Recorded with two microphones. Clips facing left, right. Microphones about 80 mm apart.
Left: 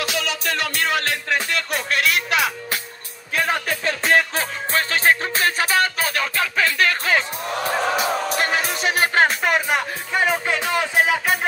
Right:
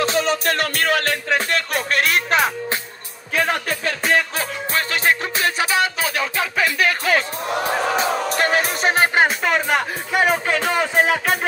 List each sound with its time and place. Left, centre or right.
0.0 s music: right
0.5 s music: right
3.3 s speech: centre
4.1 s music: left
6.5 s music: centre
8.0 s music: right
8.9 s music: right
9.4 s music: centre
10.1 s music: centre